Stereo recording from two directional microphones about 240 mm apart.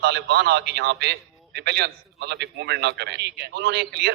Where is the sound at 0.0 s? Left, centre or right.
Right.